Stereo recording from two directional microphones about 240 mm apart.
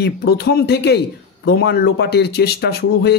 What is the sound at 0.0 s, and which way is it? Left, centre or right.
Speech, left.